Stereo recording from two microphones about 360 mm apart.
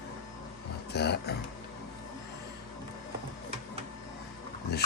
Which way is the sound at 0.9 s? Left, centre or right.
Left.